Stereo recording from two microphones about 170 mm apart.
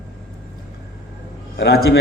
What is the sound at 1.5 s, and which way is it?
Speech, 70° left (ahead or behind).